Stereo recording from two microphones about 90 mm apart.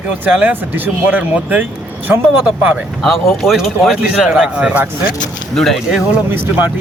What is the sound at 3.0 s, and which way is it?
A man's voice, centre (ahead or behind).